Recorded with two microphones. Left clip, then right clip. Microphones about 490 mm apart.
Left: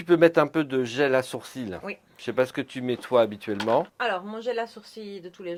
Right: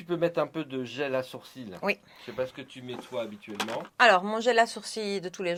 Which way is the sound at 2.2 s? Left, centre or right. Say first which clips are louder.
Left 10 dB; left.